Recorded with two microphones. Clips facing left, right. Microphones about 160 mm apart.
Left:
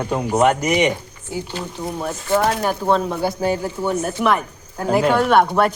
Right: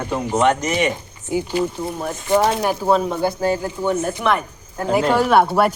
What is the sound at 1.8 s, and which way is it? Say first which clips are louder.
Speech: even; centre (ahead or behind).